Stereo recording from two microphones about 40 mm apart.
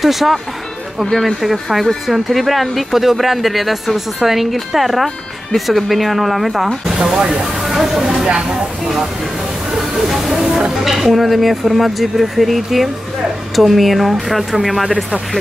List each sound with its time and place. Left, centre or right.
0.0 s speech: centre
7.0 s speech: centre
7.6 s speech: centre
9.9 s speech: centre